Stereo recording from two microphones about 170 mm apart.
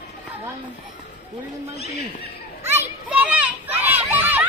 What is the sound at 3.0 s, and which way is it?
Children playing, 5° right (ahead or behind).